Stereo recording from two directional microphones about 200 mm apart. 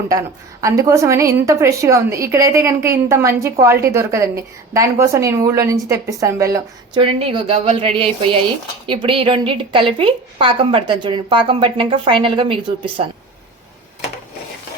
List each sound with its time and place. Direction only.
0.6 s a woman's voice: 15° right (ahead or behind)
7.0 s a woman's voice: 30° right (ahead or behind)